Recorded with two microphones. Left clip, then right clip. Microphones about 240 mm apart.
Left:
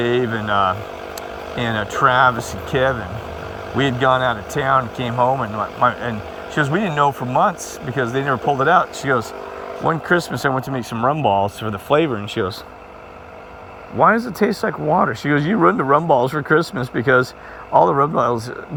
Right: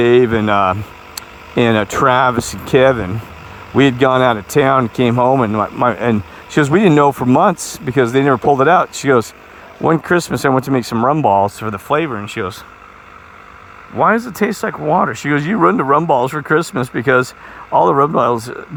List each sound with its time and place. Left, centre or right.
0.0 s speech: right
5.0 s speech: right
5.4 s speech: right
11.2 s speech: right
11.6 s speech: centre
14.0 s speech: right
14.6 s speech: right
16.3 s speech: centre
17.7 s speech: right